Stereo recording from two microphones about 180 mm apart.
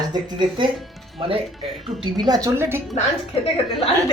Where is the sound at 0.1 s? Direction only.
25° right (ahead or behind).